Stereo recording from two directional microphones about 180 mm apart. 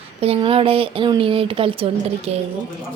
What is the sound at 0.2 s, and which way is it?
Speech, 30° right (ahead or behind).